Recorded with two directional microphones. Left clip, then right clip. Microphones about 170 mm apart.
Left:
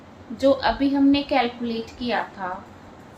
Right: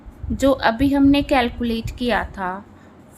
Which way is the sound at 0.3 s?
65° right (ahead or behind).